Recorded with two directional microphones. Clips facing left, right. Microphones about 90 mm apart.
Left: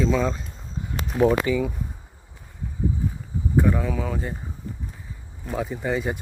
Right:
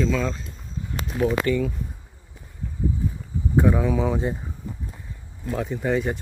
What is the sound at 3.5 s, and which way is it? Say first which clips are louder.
Speech: right 2 dB; 10° right (ahead or behind).